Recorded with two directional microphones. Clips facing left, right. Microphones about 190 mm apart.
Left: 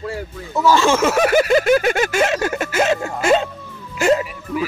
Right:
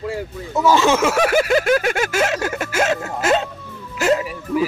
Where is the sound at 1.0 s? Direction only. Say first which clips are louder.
Left 2 dB; centre (ahead or behind).